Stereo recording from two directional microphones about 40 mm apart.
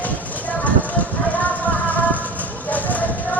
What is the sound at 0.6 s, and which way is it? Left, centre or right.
Vehicle, left.